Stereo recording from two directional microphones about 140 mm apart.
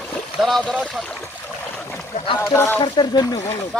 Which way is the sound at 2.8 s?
30° left (ahead or behind).